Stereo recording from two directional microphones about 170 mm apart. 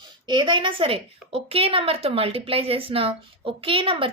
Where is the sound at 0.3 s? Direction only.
25° right (ahead or behind).